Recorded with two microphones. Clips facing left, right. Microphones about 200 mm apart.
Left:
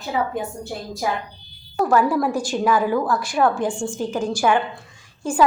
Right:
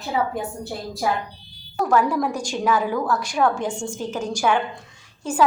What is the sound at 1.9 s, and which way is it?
A woman's voice, 5° left (ahead or behind).